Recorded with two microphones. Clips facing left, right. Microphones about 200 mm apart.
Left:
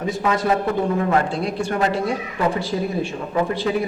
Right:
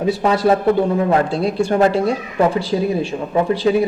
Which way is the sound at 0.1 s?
35° right (ahead or behind).